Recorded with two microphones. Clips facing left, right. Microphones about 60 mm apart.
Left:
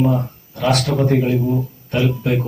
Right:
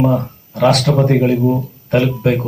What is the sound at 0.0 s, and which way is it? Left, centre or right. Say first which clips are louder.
Speech: right 3 dB; right.